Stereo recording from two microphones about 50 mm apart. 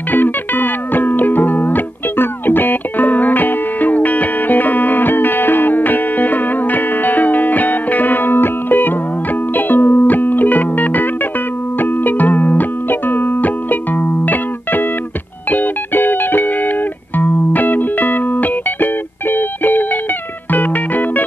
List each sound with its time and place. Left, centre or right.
0.1 s music: left